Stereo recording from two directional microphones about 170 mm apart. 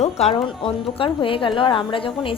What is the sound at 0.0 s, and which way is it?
A woman's voice, 40° left (ahead or behind).